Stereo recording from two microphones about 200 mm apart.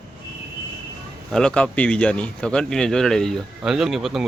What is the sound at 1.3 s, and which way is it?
Speech, 5° left (ahead or behind).